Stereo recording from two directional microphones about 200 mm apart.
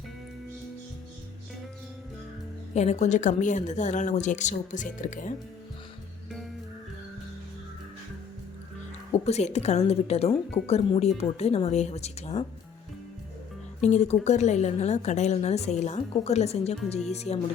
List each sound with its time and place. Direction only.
2.7 s a woman's voice: 35° left (ahead or behind)
9.2 s a woman's voice: 35° left (ahead or behind)
13.8 s a woman's voice: 35° left (ahead or behind)